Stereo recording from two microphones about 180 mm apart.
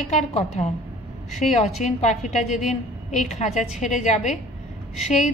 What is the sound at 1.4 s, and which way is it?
A woman's voice, 40° left (ahead or behind).